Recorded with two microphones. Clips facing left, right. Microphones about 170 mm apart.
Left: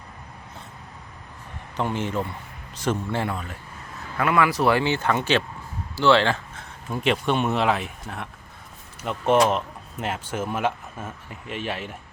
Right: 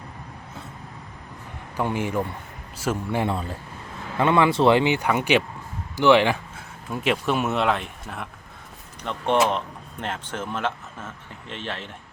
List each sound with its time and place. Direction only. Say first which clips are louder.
1.7 s a man's voice: right 1 dB; 10° right (ahead or behind)
3.2 s speech: right 3 dB; 30° right (ahead or behind); by 6.7 s 10° right (ahead or behind)
6.9 s speech: left 1 dB; centre (ahead or behind)